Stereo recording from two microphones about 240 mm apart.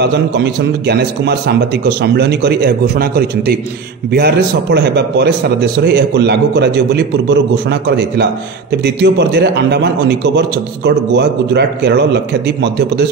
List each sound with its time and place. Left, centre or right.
0.0 s speech: right
8.8 s speech: right